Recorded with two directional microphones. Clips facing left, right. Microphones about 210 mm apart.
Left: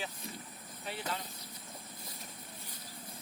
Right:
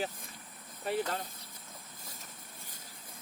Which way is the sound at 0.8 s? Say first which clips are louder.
Right 7 dB; 45° right (ahead or behind).